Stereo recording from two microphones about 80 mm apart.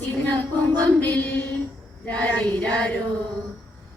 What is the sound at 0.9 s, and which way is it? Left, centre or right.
Music, left.